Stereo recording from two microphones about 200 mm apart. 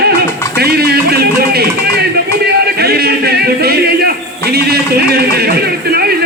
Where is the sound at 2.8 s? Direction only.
50° right (ahead or behind).